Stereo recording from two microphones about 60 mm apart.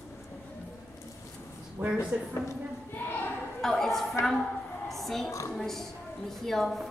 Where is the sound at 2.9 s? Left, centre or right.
Left.